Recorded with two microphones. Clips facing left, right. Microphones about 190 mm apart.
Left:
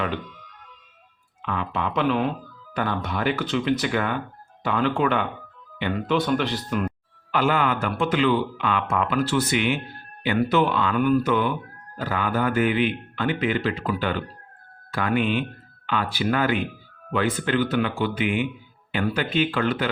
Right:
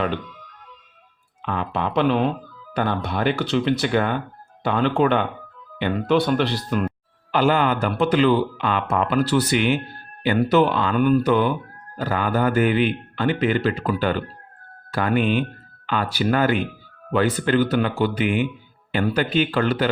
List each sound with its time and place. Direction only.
1.5 s speech: 35° right (ahead or behind)